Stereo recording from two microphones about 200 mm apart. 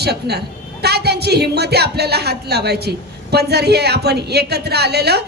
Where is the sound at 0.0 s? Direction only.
55° right (ahead or behind).